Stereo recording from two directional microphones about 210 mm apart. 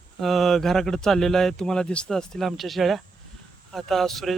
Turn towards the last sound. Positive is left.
turn(degrees=0)  # may be behind; listen again after turning